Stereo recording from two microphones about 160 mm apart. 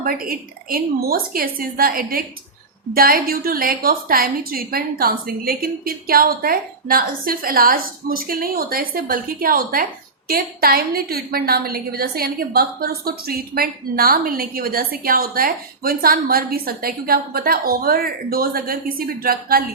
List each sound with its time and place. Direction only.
0.0 s a woman's voice: 65° right (ahead or behind)